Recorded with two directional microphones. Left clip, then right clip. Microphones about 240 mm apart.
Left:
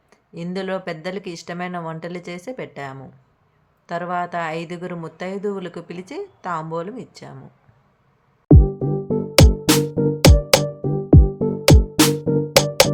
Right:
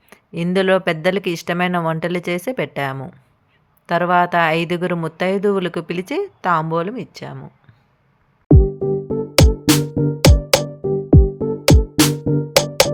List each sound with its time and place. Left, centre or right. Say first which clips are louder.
0.1 s speech: right 9 dB; right
8.5 s music: right 2 dB; centre